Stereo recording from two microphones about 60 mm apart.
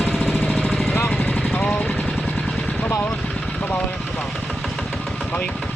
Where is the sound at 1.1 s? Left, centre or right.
Centre.